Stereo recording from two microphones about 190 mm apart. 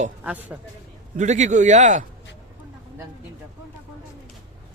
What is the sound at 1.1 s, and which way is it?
Speech, 40° right (ahead or behind).